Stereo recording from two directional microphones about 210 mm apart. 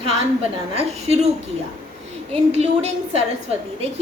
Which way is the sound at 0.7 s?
30° right (ahead or behind).